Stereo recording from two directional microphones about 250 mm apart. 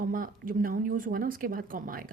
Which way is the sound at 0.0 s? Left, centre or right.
Right.